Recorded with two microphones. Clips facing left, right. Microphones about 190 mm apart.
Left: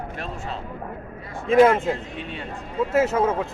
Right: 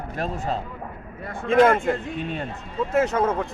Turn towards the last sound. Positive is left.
turn(degrees=5)  # may be behind; listen again after turning